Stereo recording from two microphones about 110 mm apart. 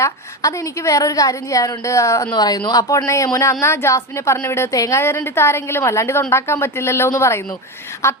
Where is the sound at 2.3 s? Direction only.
40° left (ahead or behind).